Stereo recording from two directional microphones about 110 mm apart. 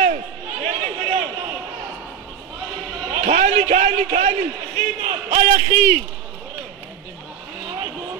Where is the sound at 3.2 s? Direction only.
90° right.